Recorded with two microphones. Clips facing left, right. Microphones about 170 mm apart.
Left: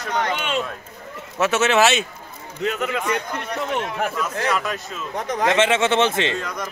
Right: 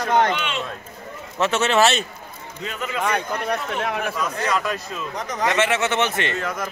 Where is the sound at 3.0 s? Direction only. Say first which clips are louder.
Right 2 dB; 70° right (ahead or behind).